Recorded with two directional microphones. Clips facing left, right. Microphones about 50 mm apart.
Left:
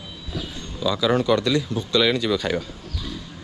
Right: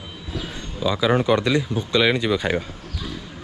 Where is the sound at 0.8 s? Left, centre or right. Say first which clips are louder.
Right 1 dB; right.